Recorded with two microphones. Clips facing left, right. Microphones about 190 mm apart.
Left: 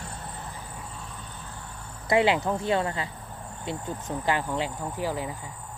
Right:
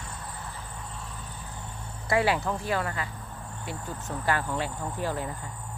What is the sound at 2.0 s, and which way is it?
Speech, 20° left (ahead or behind).